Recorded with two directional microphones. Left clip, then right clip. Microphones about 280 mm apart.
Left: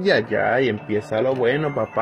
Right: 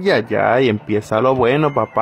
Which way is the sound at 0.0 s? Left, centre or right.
Centre.